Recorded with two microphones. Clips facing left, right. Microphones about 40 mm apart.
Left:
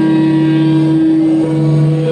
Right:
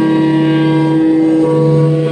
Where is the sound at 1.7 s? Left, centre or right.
Centre.